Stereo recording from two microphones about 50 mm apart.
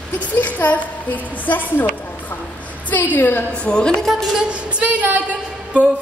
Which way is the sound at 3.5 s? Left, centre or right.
Centre.